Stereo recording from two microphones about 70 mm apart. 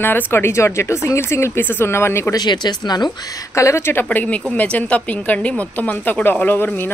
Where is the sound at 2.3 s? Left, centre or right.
Left.